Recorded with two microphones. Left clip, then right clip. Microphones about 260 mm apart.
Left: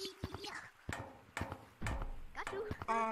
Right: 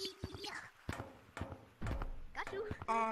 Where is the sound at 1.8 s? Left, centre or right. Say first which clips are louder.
Left 1 dB; centre.